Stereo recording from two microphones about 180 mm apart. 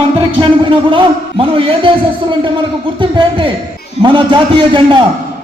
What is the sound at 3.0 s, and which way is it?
A man's voice, 30° right (ahead or behind).